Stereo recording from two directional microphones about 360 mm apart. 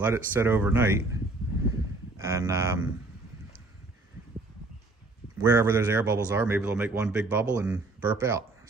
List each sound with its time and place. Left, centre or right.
0.0 s speech: centre
2.1 s speech: centre
5.4 s speech: centre